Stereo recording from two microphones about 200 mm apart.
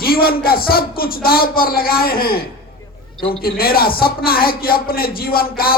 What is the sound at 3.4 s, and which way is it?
A man's voice, 50° left (ahead or behind).